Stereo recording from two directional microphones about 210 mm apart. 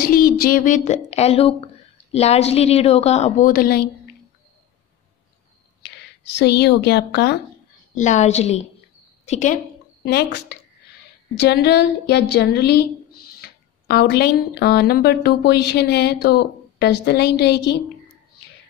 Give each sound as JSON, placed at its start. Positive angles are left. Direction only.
{"t": 0.0, "sound": "a woman's voice", "side_deg": 45}
{"t": 5.8, "sound": "a woman's voice", "side_deg": 55}
{"t": 7.9, "sound": "a woman's voice", "side_deg": 35}
{"t": 10.0, "sound": "speech", "side_deg": 50}